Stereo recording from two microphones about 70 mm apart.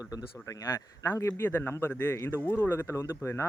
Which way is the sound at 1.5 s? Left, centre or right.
Left.